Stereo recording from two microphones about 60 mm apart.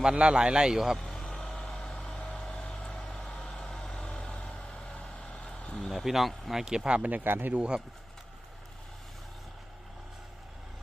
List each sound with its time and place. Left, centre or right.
0.0 s a man's voice: centre
0.9 s vehicle: centre
1.6 s vehicle: centre
5.5 s a sound: centre
5.9 s speech: centre
7.3 s speech: right